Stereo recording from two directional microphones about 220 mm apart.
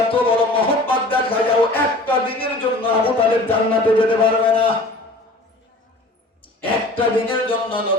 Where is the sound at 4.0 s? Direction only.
25° left (ahead or behind).